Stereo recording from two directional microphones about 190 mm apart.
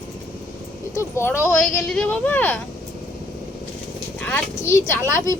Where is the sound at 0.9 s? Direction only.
15° left (ahead or behind).